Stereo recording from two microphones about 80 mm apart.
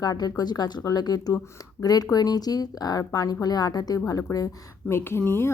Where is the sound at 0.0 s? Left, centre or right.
Left.